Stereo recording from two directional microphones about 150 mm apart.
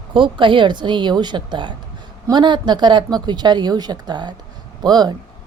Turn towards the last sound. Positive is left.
turn(degrees=-30)  # may be behind; listen again after turning